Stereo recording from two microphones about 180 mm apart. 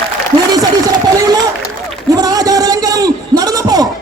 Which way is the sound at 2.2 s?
20° right (ahead or behind).